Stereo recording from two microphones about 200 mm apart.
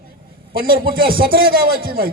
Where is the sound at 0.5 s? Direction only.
45° right (ahead or behind).